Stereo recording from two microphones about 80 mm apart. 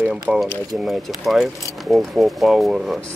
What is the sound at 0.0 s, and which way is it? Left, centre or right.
Speech, centre.